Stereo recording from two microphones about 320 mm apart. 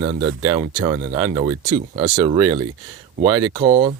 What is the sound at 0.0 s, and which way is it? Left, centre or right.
Speech, centre.